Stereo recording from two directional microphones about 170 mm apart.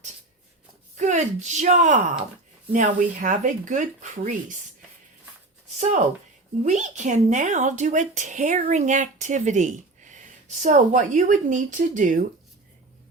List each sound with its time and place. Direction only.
0.9 s speech: 45° right (ahead or behind)
5.7 s speech: 45° right (ahead or behind)